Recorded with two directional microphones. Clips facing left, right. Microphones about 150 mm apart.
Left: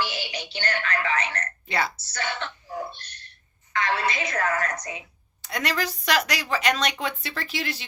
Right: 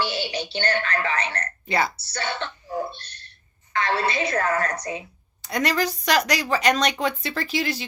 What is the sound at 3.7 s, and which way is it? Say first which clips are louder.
A woman's voice: right 2 dB; 35° right (ahead or behind).